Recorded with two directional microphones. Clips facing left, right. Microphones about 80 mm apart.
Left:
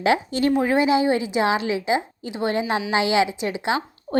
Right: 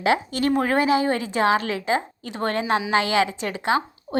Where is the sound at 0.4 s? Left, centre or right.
Right.